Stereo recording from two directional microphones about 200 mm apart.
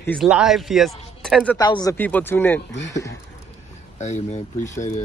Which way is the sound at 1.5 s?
20° left (ahead or behind).